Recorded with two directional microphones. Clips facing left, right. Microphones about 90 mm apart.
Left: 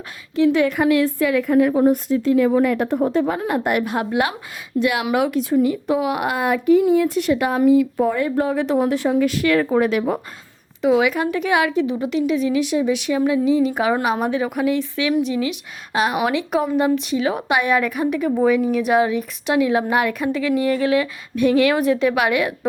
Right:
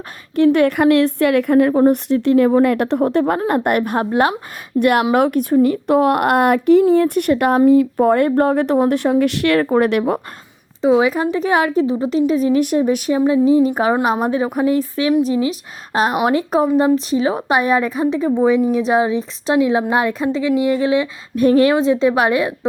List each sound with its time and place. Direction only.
0.3 s a woman's voice: 55° right (ahead or behind); by 4.4 s 40° right (ahead or behind)
4.8 s a woman's voice: 50° right (ahead or behind)
10.8 s a woman's voice: 30° right (ahead or behind)
13.1 s a woman's voice: 30° right (ahead or behind)
21.3 s a woman's voice: 40° right (ahead or behind)